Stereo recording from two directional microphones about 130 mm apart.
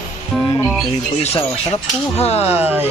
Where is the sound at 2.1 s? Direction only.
50° left (ahead or behind).